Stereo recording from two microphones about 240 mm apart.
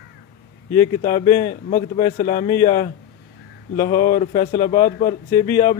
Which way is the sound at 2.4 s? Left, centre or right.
Centre.